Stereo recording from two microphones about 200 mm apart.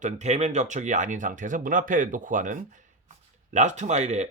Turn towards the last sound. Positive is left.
turn(degrees=-35)  # may be behind; listen again after turning